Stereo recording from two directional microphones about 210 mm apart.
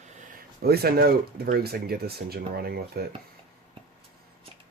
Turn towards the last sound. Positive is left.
turn(degrees=-45)  # may be behind; listen again after turning